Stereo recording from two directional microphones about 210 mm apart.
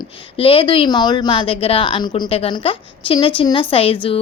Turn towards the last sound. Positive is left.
turn(degrees=25)  # may be behind; listen again after turning